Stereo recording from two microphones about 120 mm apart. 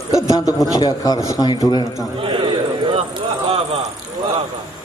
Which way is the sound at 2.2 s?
45° right (ahead or behind).